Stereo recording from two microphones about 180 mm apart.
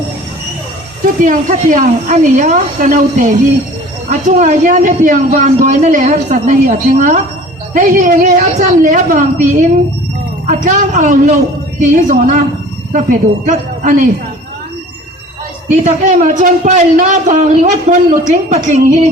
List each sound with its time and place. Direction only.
1.2 s a man's voice: 45° right (ahead or behind)
15.7 s a man's voice: 45° right (ahead or behind)